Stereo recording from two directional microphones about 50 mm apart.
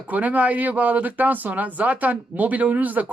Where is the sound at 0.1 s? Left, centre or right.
Right.